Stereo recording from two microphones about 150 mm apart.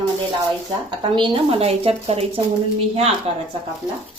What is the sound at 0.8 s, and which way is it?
Speech, 30° right (ahead or behind).